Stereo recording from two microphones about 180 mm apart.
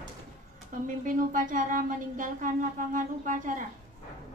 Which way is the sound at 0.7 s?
45° right (ahead or behind).